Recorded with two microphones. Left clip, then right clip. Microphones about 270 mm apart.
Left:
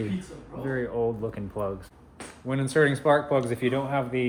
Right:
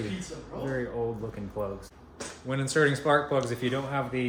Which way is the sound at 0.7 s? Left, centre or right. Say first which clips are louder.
Left 5 dB; centre.